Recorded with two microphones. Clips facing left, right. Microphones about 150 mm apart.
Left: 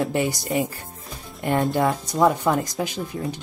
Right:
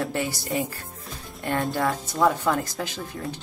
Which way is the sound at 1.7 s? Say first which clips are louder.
Left 4 dB; 20° left (ahead or behind).